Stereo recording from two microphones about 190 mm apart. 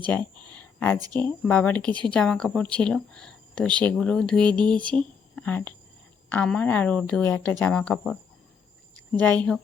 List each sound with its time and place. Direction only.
0.4 s a sound: 10° left (ahead or behind)
0.9 s speech: 20° right (ahead or behind)
1.2 s a woman's voice: 10° left (ahead or behind)